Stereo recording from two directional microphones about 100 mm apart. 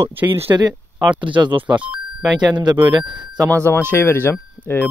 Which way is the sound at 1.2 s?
55° right (ahead or behind).